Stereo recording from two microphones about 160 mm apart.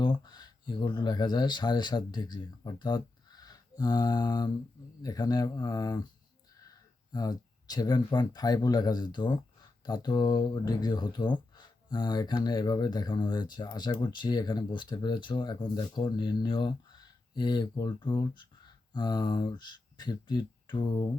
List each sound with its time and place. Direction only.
0.0 s speech: 30° left (ahead or behind)
7.1 s speech: 25° left (ahead or behind)